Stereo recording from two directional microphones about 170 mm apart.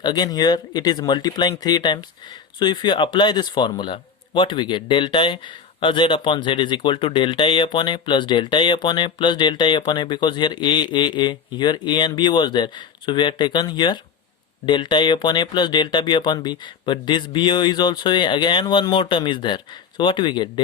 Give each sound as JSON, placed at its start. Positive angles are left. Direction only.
{"t": 0.0, "sound": "speech", "side_deg": 25}